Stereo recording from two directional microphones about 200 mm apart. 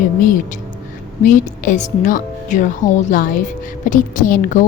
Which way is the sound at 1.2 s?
40° left (ahead or behind).